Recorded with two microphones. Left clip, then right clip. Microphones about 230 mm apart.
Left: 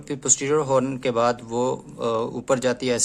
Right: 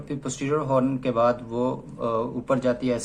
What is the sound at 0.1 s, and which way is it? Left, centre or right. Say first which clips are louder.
Speech: left 5 dB; left.